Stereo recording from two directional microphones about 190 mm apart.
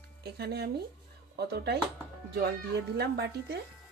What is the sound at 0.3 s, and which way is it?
Speech, 60° right (ahead or behind).